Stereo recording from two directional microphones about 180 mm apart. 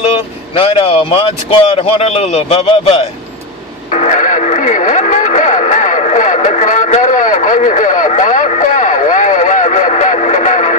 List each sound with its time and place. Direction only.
0.6 s a man's voice: 30° left (ahead or behind)
3.9 s radio: 40° left (ahead or behind)